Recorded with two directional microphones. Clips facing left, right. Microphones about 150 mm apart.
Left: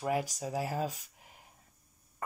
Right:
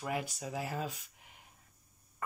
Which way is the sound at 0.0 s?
40° left (ahead or behind).